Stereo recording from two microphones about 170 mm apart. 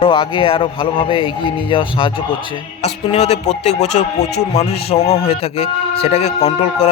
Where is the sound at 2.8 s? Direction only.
35° left (ahead or behind).